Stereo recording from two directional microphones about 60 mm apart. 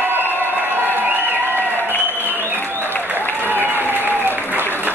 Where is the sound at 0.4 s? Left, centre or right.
Right.